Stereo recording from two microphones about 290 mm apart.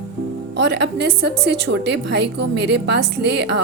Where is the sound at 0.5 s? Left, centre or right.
Right.